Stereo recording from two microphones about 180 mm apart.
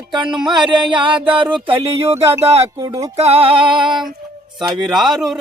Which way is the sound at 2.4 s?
35° right (ahead or behind).